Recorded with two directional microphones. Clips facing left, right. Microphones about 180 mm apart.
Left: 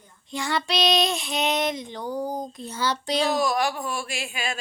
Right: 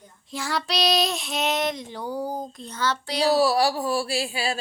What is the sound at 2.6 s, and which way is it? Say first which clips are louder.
Child singing: right 1 dB; 10° left (ahead or behind).